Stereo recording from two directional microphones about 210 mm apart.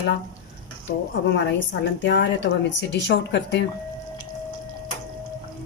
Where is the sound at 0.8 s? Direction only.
60° left (ahead or behind).